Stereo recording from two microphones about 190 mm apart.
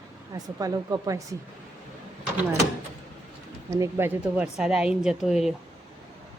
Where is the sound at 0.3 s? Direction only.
20° right (ahead or behind).